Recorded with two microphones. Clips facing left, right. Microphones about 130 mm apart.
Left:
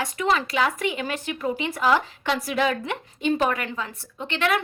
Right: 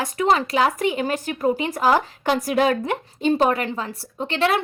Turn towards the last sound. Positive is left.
turn(degrees=-35)  # may be behind; listen again after turning